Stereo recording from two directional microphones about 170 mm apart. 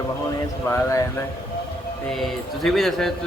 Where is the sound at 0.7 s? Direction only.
15° left (ahead or behind).